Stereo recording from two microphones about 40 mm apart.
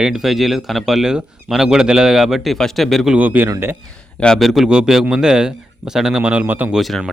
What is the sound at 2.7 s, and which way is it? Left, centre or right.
Speech, centre.